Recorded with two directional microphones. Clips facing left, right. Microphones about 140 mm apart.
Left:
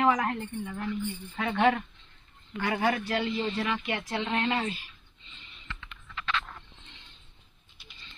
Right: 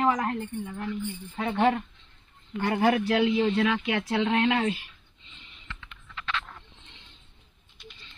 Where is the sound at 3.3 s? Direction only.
15° right (ahead or behind).